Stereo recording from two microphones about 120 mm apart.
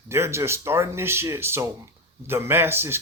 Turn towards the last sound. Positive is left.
turn(degrees=-20)  # may be behind; listen again after turning